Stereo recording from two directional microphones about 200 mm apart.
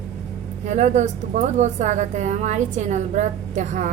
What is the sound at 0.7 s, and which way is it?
A woman's voice, 35° right (ahead or behind).